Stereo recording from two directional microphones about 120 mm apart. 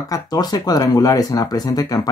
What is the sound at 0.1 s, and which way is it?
Speech, 35° left (ahead or behind).